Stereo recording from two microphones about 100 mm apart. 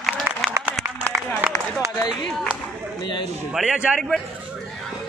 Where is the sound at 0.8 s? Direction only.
25° right (ahead or behind).